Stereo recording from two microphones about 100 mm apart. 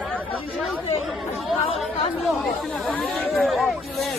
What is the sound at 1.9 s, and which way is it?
Speech, 90° left.